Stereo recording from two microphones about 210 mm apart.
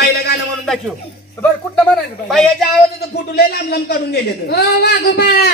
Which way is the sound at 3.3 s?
50° left (ahead or behind).